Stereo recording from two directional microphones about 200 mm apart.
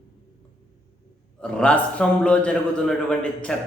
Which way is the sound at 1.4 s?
5° left (ahead or behind).